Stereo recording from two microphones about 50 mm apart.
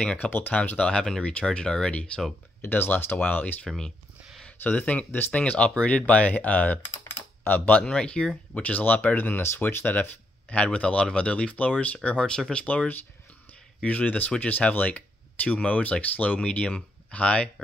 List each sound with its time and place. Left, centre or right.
0.5 s speech: left
1.9 s speech: left
2.6 s speech: left
3.6 s speech: centre
4.5 s speech: left
7.1 s typing: left
7.5 s speech: left
7.8 s speech: centre
8.5 s speech: left
9.9 s speech: left
12.3 s speech: centre
12.6 s speech: left